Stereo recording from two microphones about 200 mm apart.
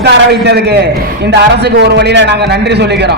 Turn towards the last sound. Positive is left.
turn(degrees=-60)  # may be behind; listen again after turning